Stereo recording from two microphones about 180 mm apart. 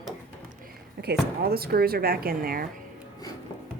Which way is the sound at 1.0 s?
60° right (ahead or behind).